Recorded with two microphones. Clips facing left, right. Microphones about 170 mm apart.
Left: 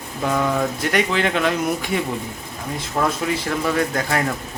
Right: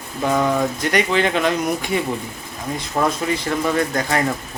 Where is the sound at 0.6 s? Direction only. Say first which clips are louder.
Right 1 dB; centre (ahead or behind).